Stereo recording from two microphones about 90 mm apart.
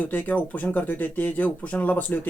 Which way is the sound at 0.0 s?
15° left (ahead or behind).